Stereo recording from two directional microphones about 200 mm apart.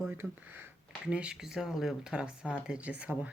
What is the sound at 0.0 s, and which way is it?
Speech, 10° right (ahead or behind).